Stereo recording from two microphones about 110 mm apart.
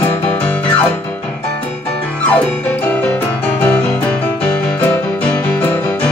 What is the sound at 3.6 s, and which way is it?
Music, 15° left (ahead or behind).